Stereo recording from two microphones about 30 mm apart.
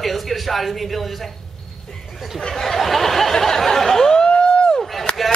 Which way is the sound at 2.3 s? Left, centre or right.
Centre.